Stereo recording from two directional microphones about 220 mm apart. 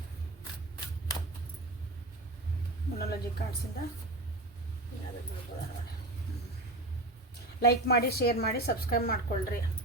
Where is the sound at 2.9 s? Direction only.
45° left (ahead or behind).